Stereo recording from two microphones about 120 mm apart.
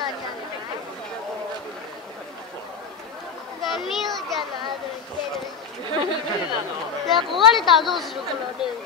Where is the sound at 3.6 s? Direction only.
Centre (ahead or behind).